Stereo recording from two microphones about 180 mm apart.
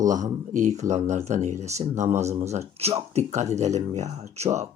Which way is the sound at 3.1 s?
40° right (ahead or behind).